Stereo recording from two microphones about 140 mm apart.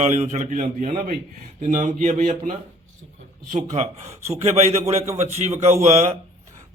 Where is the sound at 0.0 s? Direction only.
55° right (ahead or behind).